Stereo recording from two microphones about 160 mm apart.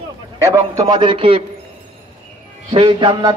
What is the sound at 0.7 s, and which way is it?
Speech, 25° right (ahead or behind).